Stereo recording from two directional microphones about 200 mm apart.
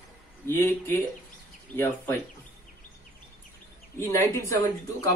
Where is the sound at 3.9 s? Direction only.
15° left (ahead or behind).